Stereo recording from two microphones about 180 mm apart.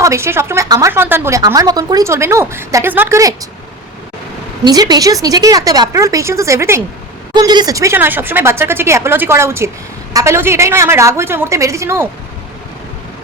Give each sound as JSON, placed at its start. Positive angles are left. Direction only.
{"t": 0.0, "sound": "speech", "side_deg": -15}
{"t": 4.6, "sound": "speech", "side_deg": -20}